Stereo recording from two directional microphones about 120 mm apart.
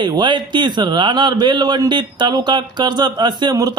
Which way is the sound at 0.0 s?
40° right (ahead or behind).